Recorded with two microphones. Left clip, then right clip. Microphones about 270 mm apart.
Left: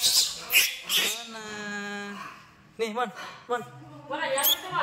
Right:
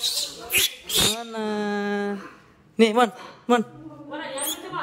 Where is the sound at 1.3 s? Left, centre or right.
Right.